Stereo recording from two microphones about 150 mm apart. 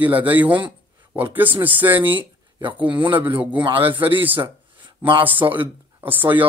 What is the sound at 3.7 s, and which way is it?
Speech, 15° right (ahead or behind).